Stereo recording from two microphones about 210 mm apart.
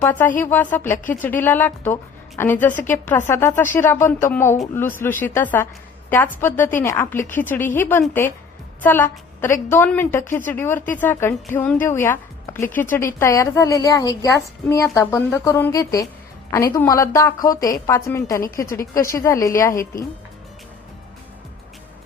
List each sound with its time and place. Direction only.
0.0 s a woman's voice: 10° left (ahead or behind)